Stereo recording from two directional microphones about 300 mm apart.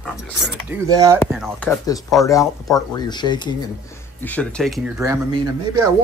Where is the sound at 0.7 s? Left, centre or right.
Centre.